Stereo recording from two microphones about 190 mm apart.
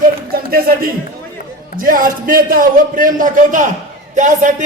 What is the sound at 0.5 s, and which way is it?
A man's voice, 50° right (ahead or behind).